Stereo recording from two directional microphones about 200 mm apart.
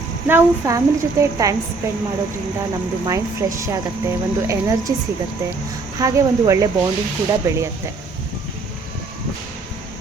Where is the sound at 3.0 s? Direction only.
15° right (ahead or behind).